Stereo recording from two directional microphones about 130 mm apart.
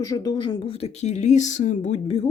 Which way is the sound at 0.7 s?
50° left (ahead or behind).